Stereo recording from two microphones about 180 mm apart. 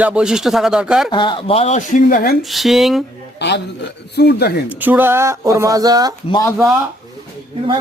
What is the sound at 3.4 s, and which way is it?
A man's voice, 70° left (ahead or behind).